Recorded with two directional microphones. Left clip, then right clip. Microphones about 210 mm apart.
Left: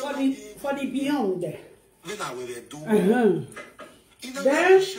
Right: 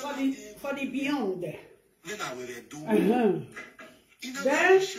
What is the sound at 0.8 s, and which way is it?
Speech, 15° left (ahead or behind).